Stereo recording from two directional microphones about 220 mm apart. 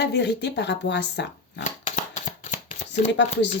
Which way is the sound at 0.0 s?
50° left (ahead or behind).